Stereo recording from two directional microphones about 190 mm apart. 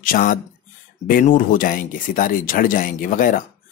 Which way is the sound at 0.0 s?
45° left (ahead or behind).